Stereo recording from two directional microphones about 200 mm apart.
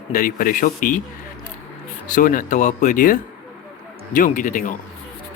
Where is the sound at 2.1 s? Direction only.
40° left (ahead or behind).